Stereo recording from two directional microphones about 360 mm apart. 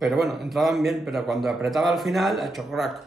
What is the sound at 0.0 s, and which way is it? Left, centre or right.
Speech, centre.